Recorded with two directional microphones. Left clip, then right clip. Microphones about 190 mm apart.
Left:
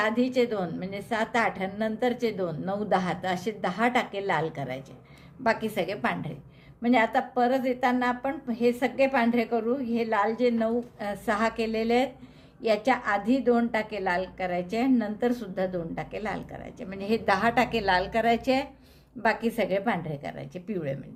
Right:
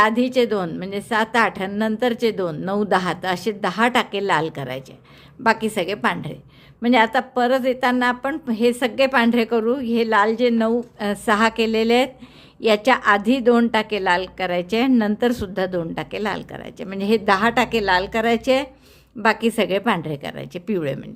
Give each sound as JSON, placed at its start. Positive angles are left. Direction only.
{"t": 0.0, "sound": "a woman's voice", "side_deg": -35}